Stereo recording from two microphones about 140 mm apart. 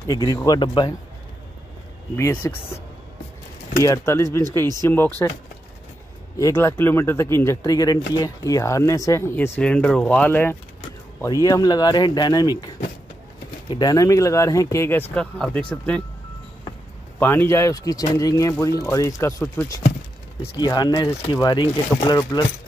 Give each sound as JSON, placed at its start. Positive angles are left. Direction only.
{"t": 0.0, "sound": "speech", "side_deg": 25}
{"t": 2.4, "sound": "speech", "side_deg": 20}
{"t": 3.8, "sound": "speech", "side_deg": 20}
{"t": 6.3, "sound": "speech", "side_deg": 20}
{"t": 11.4, "sound": "speech", "side_deg": 25}
{"t": 17.2, "sound": "speech", "side_deg": 15}